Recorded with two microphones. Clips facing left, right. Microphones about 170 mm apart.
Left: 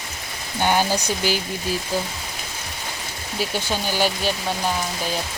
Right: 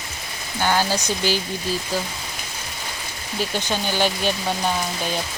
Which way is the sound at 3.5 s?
10° left (ahead or behind).